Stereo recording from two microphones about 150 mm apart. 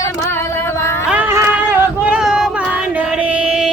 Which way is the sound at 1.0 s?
10° right (ahead or behind).